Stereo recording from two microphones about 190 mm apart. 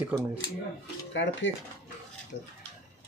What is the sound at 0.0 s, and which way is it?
Speech, 10° right (ahead or behind).